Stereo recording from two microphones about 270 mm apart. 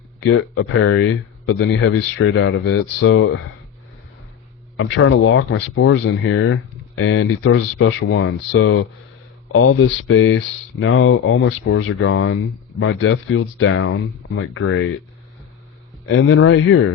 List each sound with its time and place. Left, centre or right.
0.3 s speech: left
4.8 s speech: left
5.1 s speech: left
16.0 s speech: left